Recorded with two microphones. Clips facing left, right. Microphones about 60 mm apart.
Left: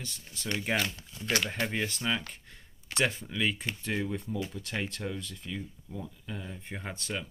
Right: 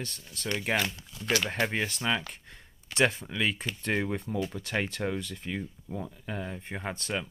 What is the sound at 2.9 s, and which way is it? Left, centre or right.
Speech, right.